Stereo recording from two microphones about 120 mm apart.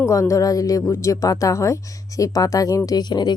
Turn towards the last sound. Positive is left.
turn(degrees=35)  # may be behind; listen again after turning